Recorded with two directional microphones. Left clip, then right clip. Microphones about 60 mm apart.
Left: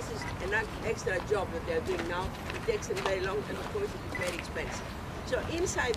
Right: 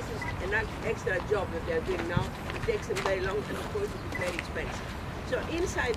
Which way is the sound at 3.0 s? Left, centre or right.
Left.